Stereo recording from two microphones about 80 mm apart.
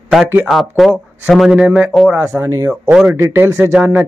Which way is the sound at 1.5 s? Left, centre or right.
Centre.